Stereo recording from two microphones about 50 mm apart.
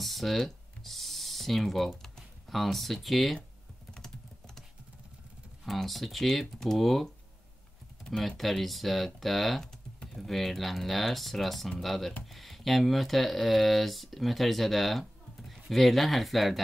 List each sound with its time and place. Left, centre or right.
0.0 s speech: centre
5.6 s speech: centre
8.2 s speech: centre